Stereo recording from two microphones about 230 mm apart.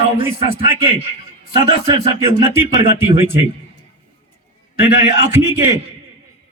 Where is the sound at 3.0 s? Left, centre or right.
Centre.